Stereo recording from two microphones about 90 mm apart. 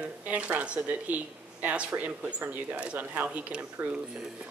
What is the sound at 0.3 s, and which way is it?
Speech, 15° right (ahead or behind).